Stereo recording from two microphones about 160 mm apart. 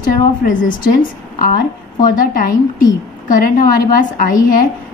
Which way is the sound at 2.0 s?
60° left (ahead or behind).